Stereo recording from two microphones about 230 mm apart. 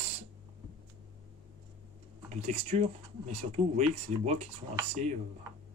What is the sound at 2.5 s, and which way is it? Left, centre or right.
Speech, right.